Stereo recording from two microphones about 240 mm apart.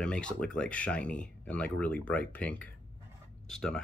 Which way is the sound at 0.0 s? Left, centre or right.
Centre.